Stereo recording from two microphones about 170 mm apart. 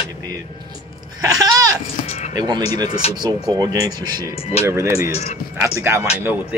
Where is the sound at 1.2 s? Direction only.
20° right (ahead or behind).